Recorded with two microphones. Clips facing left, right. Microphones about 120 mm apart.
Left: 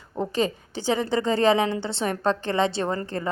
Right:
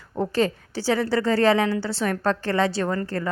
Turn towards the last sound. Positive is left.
turn(degrees=20)  # may be behind; listen again after turning